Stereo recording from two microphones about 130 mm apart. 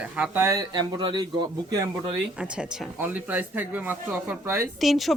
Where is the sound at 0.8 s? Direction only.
35° right (ahead or behind).